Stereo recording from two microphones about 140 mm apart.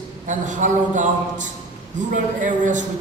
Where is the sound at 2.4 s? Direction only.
65° right (ahead or behind).